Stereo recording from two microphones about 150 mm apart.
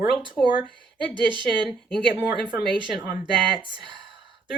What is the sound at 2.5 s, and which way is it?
Speech, 30° right (ahead or behind).